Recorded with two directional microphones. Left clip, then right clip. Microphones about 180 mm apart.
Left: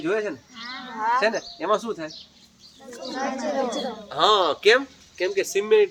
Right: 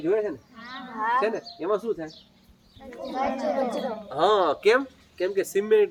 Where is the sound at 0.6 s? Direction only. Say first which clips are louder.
Left 2 dB; 40° right (ahead or behind).